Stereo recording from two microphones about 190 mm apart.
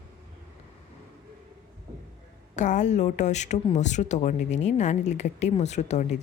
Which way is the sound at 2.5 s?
40° left (ahead or behind).